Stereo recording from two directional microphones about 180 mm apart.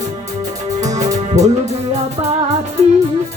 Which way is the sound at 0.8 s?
20° right (ahead or behind).